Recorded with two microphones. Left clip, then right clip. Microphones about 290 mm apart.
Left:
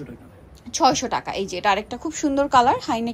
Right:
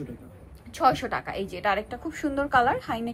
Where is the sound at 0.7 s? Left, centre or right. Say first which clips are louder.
Left 4 dB; centre.